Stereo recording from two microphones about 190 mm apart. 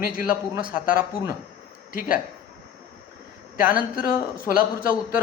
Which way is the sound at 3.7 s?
50° left (ahead or behind).